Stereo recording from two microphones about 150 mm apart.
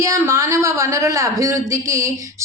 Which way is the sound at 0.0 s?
20° right (ahead or behind).